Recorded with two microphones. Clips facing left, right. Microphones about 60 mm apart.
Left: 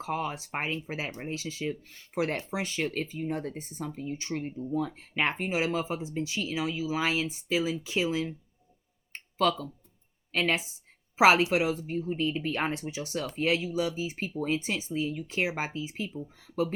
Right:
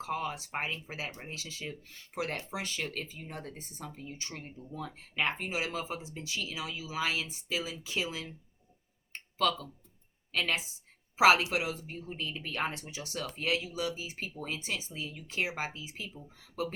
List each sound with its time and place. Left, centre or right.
0.0 s speech: left
10.3 s speech: left